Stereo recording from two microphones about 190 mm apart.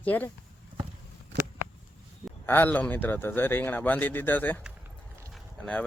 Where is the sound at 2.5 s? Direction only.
10° left (ahead or behind).